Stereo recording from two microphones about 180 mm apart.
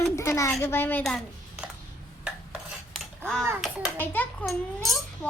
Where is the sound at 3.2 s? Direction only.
5° left (ahead or behind).